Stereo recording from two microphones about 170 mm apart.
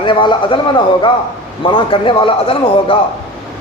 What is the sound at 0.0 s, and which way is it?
A man's voice, 30° left (ahead or behind).